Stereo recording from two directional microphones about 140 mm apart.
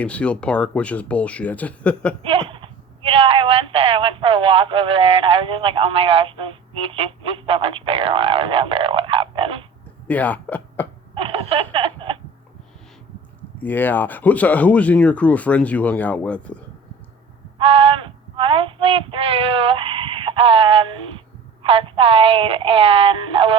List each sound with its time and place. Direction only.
0.0 s speech: 10° left (ahead or behind)
2.2 s speech: 40° right (ahead or behind)
10.1 s speech: 10° left (ahead or behind)
11.1 s a sound: 40° right (ahead or behind)
13.6 s speech: 15° left (ahead or behind)
17.6 s female singing: 45° right (ahead or behind)
21.6 s speech: 40° right (ahead or behind)